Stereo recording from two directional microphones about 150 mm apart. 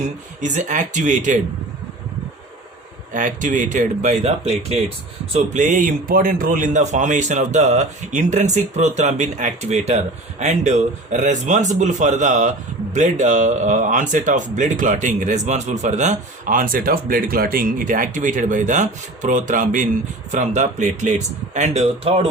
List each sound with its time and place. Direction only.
0.0 s a man's voice: 55° right (ahead or behind)
3.1 s a man's voice: 60° right (ahead or behind)
5.3 s a man's voice: 55° right (ahead or behind); by 22.3 s 40° right (ahead or behind)